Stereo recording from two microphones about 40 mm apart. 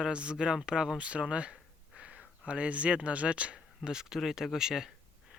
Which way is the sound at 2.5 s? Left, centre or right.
Right.